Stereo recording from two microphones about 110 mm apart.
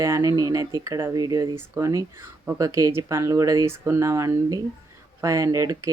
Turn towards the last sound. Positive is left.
turn(degrees=-30)  # may be behind; listen again after turning